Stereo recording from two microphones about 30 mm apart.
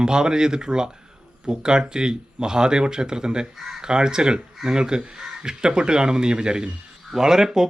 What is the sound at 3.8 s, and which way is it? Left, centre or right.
A man's voice, right.